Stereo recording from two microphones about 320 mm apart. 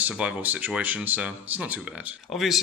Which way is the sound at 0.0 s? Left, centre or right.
Centre.